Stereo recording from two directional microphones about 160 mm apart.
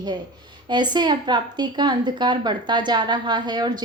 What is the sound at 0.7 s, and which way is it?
A woman's voice, 30° right (ahead or behind).